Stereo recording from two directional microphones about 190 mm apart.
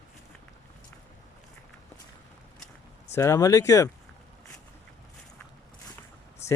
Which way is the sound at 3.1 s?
15° left (ahead or behind).